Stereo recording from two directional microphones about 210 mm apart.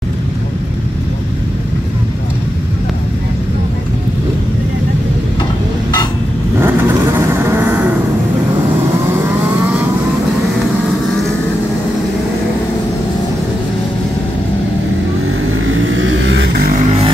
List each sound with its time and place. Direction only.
6.6 s vehicle: 10° right (ahead or behind)
15.6 s vehicle: 70° right (ahead or behind)
16.7 s vehicle: 30° right (ahead or behind)